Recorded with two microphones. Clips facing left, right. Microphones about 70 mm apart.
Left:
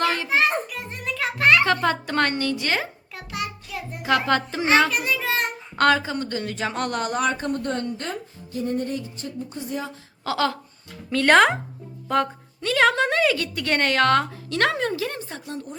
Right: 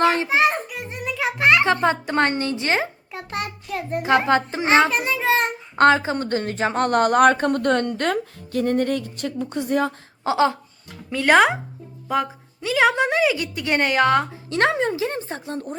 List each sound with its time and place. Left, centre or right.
0.0 s a sound: right
0.3 s music: centre
3.3 s child singing: right
4.3 s a child's voice: right
10.2 s a woman's voice: right
11.1 s a woman's voice: centre; by 15.8 s right